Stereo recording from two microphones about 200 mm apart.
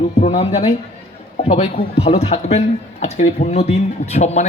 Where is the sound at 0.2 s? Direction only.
35° left (ahead or behind).